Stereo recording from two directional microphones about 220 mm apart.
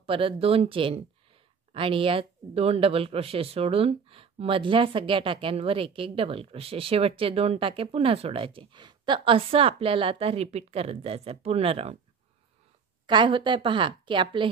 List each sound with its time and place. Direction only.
0.0 s speech: 25° right (ahead or behind)
13.0 s speech: 20° right (ahead or behind)